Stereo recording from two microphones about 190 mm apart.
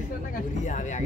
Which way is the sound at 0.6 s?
40° left (ahead or behind).